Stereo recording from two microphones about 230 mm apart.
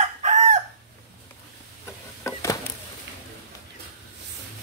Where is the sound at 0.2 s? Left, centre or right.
Right.